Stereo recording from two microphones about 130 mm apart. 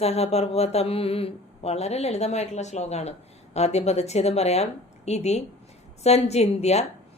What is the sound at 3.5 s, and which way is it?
A woman's voice, 55° left (ahead or behind).